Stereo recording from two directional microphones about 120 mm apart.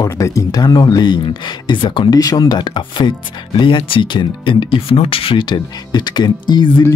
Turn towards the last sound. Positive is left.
turn(degrees=35)  # may be behind; listen again after turning